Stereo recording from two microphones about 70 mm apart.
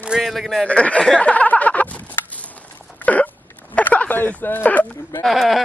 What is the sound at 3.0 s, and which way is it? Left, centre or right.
Hiccup, left.